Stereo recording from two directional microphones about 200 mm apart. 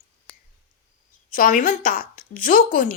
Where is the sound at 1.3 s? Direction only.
40° left (ahead or behind).